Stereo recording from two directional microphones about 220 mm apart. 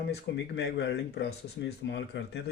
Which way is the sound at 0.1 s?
50° left (ahead or behind).